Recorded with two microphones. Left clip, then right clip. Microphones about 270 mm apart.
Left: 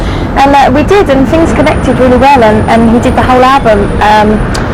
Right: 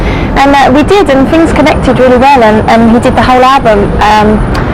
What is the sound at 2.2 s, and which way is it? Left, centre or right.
Speech, right.